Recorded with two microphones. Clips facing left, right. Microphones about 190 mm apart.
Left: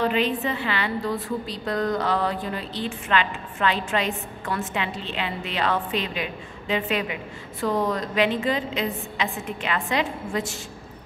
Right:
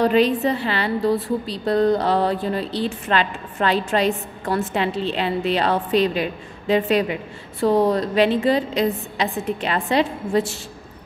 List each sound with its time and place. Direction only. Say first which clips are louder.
0.0 s a woman's voice: right 6 dB; 40° right (ahead or behind)